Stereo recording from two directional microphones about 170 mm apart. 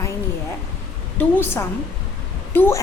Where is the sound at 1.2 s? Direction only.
10° left (ahead or behind).